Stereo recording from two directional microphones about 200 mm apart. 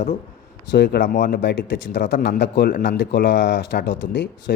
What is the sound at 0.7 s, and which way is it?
Speech, 60° left (ahead or behind).